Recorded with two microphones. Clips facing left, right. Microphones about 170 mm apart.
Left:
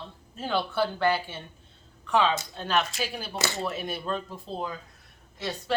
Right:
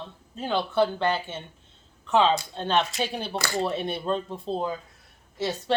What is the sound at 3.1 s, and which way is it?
Speech, 30° right (ahead or behind).